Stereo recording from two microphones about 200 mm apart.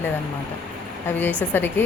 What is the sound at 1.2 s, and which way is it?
Speech, 10° left (ahead or behind).